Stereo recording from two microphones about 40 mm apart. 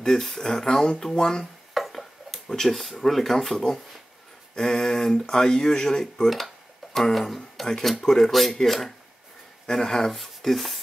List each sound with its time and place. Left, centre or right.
0.0 s speech: centre
1.4 s a sound: centre
2.4 s speech: centre
6.3 s a sound: centre
7.6 s speech: centre
8.3 s speech: centre